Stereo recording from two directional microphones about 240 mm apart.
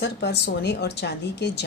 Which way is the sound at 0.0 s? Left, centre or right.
Left.